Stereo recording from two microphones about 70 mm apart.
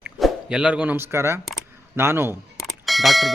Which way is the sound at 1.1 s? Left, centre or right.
Right.